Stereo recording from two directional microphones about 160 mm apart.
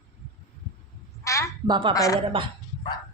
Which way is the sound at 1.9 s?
20° left (ahead or behind).